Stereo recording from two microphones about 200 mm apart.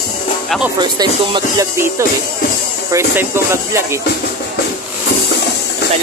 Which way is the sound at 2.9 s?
10° right (ahead or behind).